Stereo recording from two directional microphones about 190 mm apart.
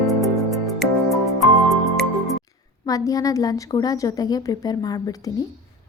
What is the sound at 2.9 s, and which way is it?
A woman's voice, 20° left (ahead or behind).